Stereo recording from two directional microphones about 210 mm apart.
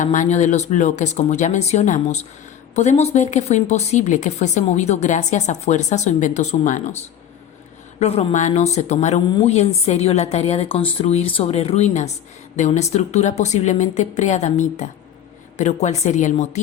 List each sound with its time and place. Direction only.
0.0 s speech: 35° left (ahead or behind)
7.9 s a woman's voice: 30° left (ahead or behind)